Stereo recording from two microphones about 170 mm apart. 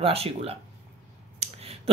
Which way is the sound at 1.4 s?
35° right (ahead or behind).